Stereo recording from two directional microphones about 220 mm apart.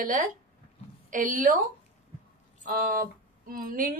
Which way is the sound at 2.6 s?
40° right (ahead or behind).